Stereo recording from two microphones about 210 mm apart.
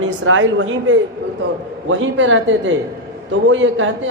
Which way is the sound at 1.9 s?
65° right (ahead or behind).